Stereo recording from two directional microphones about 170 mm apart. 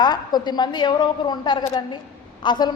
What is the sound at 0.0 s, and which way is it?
A woman's voice, 25° left (ahead or behind).